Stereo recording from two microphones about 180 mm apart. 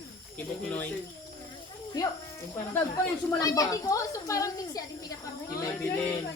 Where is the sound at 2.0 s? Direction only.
20° left (ahead or behind).